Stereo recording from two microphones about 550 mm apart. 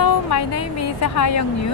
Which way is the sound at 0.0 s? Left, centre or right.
Left.